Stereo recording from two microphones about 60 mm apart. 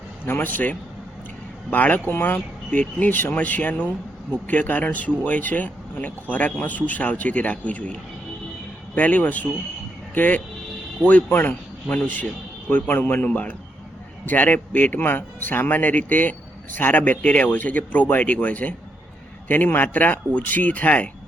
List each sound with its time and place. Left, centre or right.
0.3 s speech: left
9.0 s a man's voice: left